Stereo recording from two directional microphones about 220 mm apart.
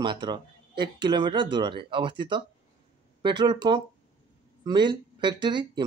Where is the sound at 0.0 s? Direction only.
20° right (ahead or behind).